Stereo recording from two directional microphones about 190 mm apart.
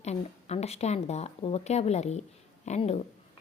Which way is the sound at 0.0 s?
35° left (ahead or behind).